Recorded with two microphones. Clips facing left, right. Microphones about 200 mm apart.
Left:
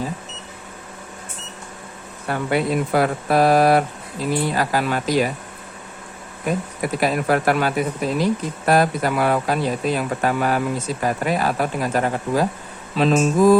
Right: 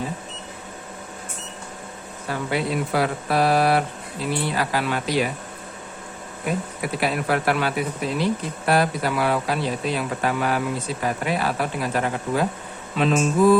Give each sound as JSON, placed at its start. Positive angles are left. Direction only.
{"t": 2.2, "sound": "speech", "side_deg": 55}
{"t": 6.8, "sound": "speech", "side_deg": 45}
{"t": 13.0, "sound": "mantra", "side_deg": 35}